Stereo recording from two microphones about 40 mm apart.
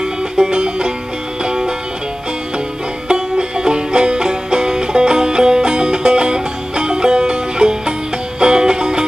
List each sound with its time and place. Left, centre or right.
0.0 s music: right
3.1 s music: right